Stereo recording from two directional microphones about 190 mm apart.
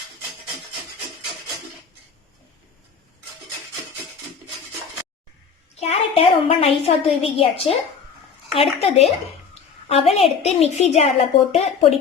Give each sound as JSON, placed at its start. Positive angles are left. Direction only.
{"t": 5.8, "sound": "a woman's voice", "side_deg": 30}